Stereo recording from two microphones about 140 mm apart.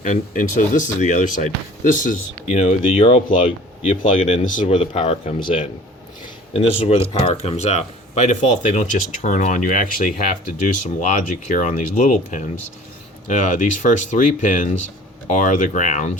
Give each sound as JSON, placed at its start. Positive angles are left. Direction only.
{"t": 0.0, "sound": "speech", "side_deg": 65}
{"t": 3.8, "sound": "speech", "side_deg": 60}
{"t": 4.6, "sound": "speech", "side_deg": 40}
{"t": 11.0, "sound": "speech", "side_deg": 60}